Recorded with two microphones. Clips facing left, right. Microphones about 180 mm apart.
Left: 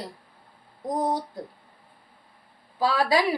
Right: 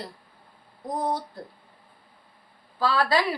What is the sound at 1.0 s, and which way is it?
Speech, 15° left (ahead or behind).